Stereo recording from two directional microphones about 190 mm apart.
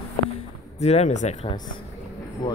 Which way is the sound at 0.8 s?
35° left (ahead or behind).